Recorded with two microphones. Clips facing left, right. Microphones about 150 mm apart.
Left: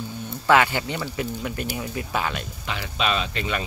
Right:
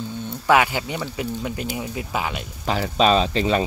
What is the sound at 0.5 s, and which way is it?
Speech, 15° right (ahead or behind).